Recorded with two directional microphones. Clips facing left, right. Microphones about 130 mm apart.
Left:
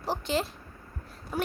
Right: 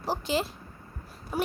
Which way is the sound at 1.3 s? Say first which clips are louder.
Right 2 dB; 10° right (ahead or behind).